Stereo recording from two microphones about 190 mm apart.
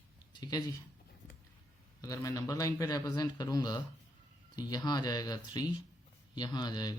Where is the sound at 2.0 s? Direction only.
15° left (ahead or behind).